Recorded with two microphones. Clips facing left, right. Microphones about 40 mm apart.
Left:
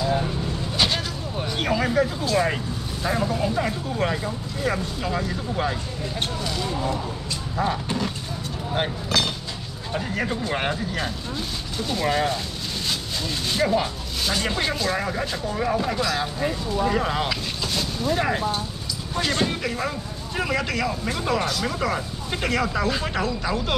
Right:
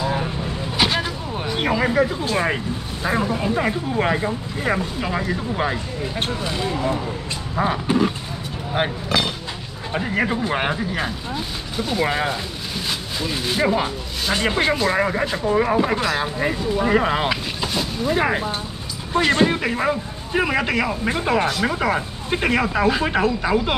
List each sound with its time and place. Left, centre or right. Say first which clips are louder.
0.0 s vehicle: right 1 dB; centre
2.2 s speech: right 1 dB; right